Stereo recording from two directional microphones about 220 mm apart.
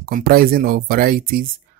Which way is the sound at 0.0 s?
40° right (ahead or behind).